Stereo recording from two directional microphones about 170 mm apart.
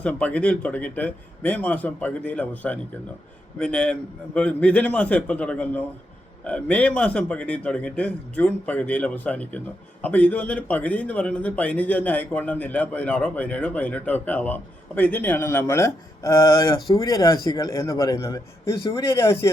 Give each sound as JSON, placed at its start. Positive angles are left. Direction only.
{"t": 0.0, "sound": "a man's voice", "side_deg": 10}
{"t": 3.6, "sound": "a man's voice", "side_deg": 5}